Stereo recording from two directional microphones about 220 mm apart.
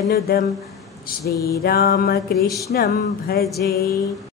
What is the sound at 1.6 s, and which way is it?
Music, 45° left (ahead or behind).